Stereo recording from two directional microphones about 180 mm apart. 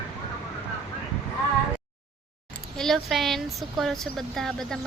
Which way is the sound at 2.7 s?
Centre (ahead or behind).